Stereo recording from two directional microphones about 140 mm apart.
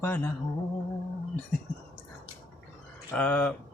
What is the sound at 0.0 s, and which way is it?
Speech, 15° left (ahead or behind).